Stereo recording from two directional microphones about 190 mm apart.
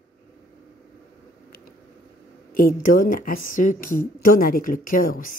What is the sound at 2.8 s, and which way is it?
Speech, 45° left (ahead or behind).